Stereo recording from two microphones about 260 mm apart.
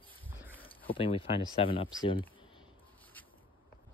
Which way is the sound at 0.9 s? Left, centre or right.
Centre.